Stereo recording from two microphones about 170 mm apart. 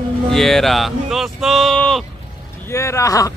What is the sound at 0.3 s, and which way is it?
Speech, centre (ahead or behind).